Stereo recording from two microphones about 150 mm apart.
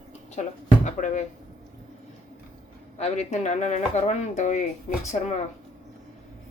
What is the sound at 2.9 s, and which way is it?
Speech, 50° left (ahead or behind).